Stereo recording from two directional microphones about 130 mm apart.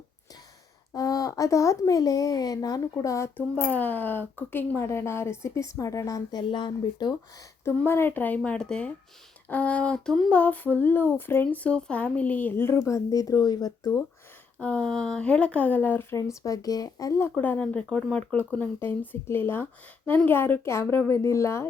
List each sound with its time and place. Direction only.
0.9 s speech: 25° left (ahead or behind)
3.5 s speech: 10° left (ahead or behind); by 7.1 s 35° left (ahead or behind)
7.6 s speech: 20° left (ahead or behind)
14.6 s speech: 10° left (ahead or behind)